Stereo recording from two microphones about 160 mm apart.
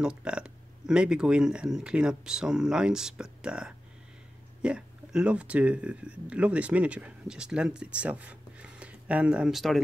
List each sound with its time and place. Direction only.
0.0 s speech: 5° right (ahead or behind)